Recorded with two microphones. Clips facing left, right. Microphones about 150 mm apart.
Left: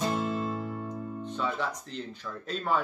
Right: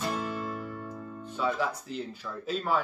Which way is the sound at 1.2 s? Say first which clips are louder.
Right 3 dB; 5° right (ahead or behind).